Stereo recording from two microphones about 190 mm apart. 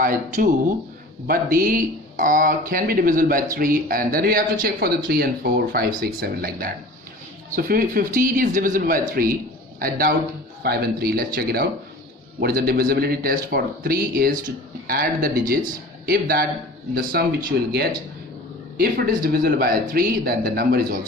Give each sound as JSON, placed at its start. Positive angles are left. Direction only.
{"t": 0.0, "sound": "speech", "side_deg": -45}
{"t": 17.5, "sound": "speech", "side_deg": -60}
{"t": 18.8, "sound": "speech", "side_deg": -50}